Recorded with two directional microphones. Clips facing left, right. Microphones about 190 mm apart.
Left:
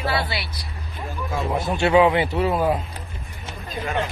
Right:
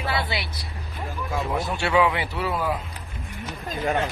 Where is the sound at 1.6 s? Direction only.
25° left (ahead or behind).